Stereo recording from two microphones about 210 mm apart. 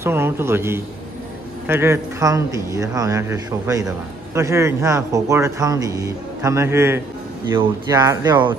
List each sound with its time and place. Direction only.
0.0 s speech: 10° right (ahead or behind)